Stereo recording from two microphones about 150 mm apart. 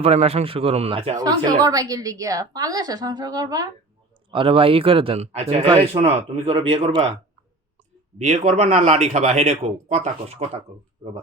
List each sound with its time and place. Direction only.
0.0 s speech: 45° right (ahead or behind)
1.1 s a woman's voice: 25° right (ahead or behind)
4.3 s speech: 35° right (ahead or behind)
8.4 s speech: 50° right (ahead or behind)